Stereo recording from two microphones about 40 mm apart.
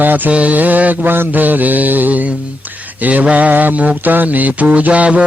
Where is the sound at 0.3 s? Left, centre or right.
Right.